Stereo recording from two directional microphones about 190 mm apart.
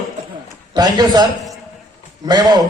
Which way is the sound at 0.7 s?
20° right (ahead or behind).